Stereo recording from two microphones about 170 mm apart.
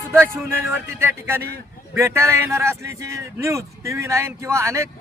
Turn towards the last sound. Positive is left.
turn(degrees=-15)  # may be behind; listen again after turning